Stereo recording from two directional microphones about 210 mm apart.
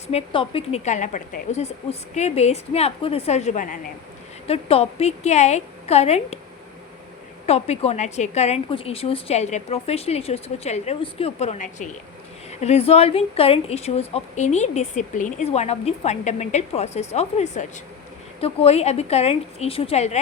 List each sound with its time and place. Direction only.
0.1 s a woman's voice: 30° left (ahead or behind)
7.4 s a woman's voice: 30° left (ahead or behind)